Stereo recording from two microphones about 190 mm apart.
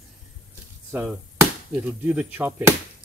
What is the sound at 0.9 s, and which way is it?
Chop, 10° right (ahead or behind).